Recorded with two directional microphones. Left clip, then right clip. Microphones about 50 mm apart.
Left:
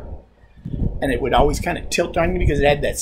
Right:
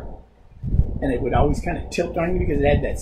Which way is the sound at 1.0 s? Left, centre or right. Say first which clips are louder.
Left 4 dB; left.